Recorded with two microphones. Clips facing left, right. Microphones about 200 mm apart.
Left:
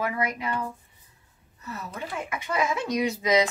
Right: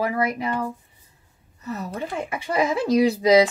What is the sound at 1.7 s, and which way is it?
Speech, 30° right (ahead or behind).